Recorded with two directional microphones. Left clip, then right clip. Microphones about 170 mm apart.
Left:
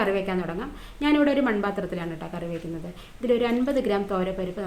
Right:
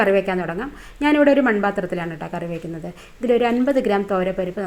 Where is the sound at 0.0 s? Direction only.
40° right (ahead or behind).